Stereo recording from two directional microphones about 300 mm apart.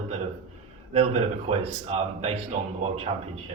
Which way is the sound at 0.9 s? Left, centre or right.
Right.